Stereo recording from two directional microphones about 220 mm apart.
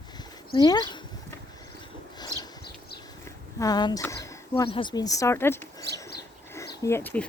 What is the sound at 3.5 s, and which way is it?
Speech, 15° left (ahead or behind).